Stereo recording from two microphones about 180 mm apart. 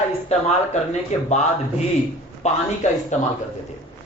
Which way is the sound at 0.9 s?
40° left (ahead or behind).